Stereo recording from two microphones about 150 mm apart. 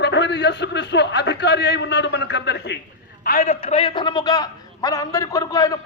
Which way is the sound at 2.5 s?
90° left.